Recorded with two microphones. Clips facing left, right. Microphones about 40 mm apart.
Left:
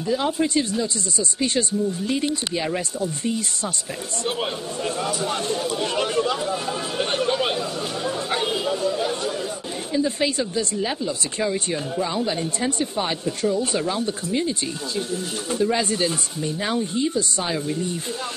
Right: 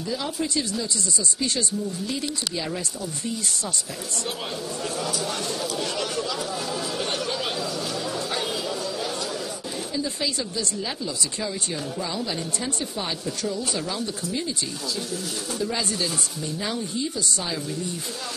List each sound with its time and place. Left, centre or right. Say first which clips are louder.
0.1 s speech: left 6 dB; left
4.8 s speech: left 4 dB; left
8.3 s chatter: left 4 dB; left
9.9 s speech: left 7 dB; left
15.6 s a woman's voice: left 6 dB; left